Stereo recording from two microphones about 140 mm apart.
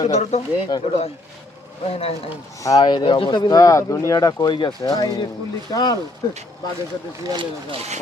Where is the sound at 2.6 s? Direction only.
25° left (ahead or behind).